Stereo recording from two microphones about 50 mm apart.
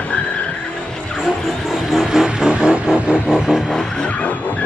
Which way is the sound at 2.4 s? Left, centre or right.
Right.